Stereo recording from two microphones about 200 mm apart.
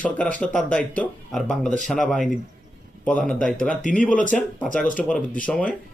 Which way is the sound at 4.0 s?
40° left (ahead or behind).